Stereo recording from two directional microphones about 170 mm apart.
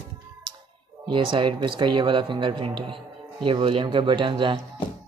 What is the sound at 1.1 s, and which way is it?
Speech, 30° right (ahead or behind).